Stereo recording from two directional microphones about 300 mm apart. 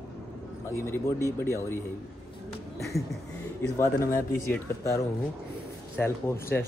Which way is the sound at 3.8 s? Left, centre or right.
Centre.